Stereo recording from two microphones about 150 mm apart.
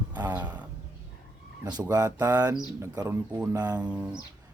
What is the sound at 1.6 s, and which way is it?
Speech, 25° right (ahead or behind).